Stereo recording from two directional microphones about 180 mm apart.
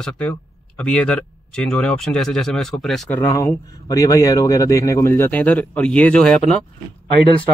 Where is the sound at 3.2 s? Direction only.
20° left (ahead or behind).